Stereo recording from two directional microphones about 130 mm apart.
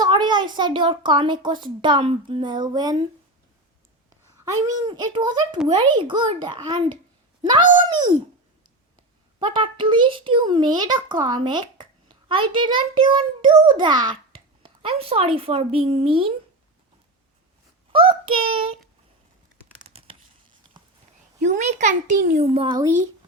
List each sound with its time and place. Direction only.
0.0 s a child's voice: 35° right (ahead or behind)
4.4 s a child's voice: 25° right (ahead or behind)
9.4 s a child's voice: 40° right (ahead or behind)
17.9 s a child's voice: 45° right (ahead or behind)
19.8 s tearing: 50° right (ahead or behind)
21.3 s a child's voice: 65° right (ahead or behind)
22.5 s a child's voice: 45° right (ahead or behind)